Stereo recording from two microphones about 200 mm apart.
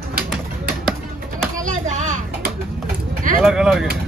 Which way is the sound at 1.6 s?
40° right (ahead or behind).